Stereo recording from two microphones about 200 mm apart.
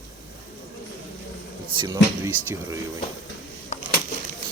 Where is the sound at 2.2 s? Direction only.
15° right (ahead or behind).